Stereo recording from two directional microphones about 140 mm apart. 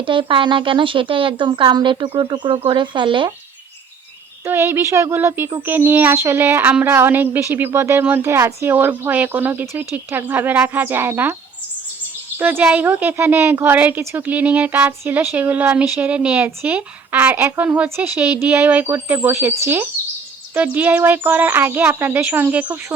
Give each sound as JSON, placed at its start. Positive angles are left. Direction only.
{"t": 0.0, "sound": "speech", "side_deg": -35}
{"t": 4.4, "sound": "a woman's voice", "side_deg": -15}
{"t": 12.4, "sound": "a woman's voice", "side_deg": -15}